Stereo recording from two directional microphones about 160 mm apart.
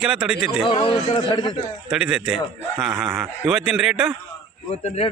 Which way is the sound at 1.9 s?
5° right (ahead or behind).